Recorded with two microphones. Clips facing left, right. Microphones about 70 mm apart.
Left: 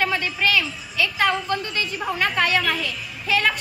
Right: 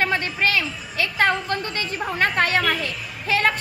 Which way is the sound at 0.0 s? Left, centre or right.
Right.